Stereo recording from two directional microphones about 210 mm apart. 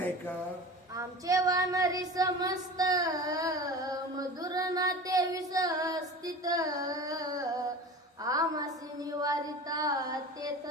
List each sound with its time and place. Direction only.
0.9 s child singing: 15° right (ahead or behind)